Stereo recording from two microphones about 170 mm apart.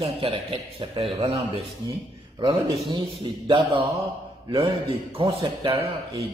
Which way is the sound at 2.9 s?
30° right (ahead or behind).